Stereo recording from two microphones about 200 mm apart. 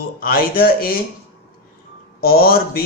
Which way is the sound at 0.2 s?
50° left (ahead or behind).